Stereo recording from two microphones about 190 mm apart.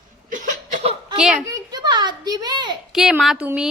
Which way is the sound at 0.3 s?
45° right (ahead or behind).